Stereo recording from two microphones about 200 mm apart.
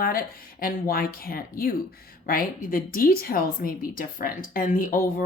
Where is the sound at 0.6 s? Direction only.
45° left (ahead or behind).